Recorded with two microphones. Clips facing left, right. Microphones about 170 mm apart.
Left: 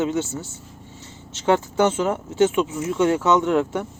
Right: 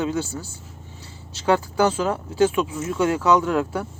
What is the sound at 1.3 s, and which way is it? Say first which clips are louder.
Speech: left 1 dB; 25° left (ahead or behind).